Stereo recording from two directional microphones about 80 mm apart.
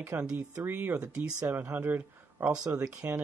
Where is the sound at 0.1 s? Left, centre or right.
Right.